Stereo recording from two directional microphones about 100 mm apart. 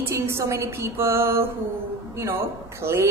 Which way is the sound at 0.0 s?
30° right (ahead or behind).